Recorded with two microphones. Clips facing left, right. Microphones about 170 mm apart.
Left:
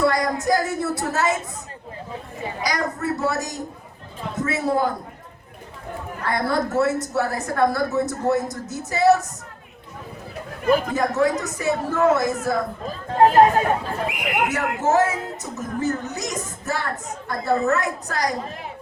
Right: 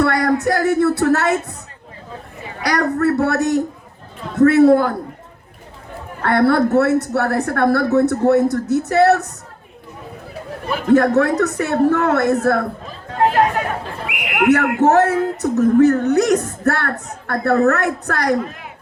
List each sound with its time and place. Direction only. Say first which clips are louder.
0.0 s music: right 4 dB; 65° right (ahead or behind)
0.4 s speech: right 6 dB; 65° right (ahead or behind)
2.6 s speech: right 9 dB; 65° right (ahead or behind)
6.2 s speech: right 9 dB; 65° right (ahead or behind)
10.8 s speech: right 7 dB; 65° right (ahead or behind)
14.4 s speech: right 11 dB; 65° right (ahead or behind)